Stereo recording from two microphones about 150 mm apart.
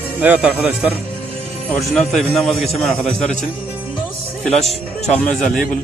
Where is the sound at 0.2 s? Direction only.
10° right (ahead or behind).